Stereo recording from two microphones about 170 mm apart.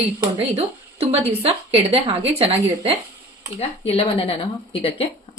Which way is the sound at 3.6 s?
35° left (ahead or behind).